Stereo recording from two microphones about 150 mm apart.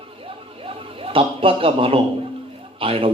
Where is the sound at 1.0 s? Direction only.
35° right (ahead or behind).